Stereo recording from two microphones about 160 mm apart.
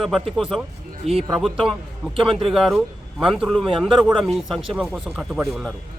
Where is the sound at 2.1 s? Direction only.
35° right (ahead or behind).